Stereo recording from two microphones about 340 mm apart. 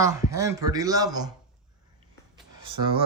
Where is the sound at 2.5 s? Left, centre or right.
Right.